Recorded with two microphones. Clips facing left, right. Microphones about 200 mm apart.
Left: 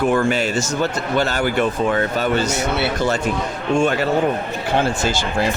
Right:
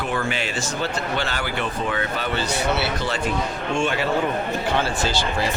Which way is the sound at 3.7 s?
40° left (ahead or behind).